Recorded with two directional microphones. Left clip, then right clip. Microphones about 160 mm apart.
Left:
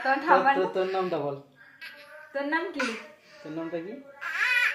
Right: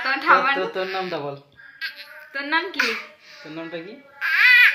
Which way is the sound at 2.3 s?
40° left (ahead or behind).